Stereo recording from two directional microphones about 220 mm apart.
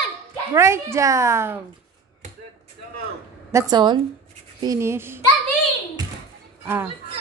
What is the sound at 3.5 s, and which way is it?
A woman's voice, 15° right (ahead or behind).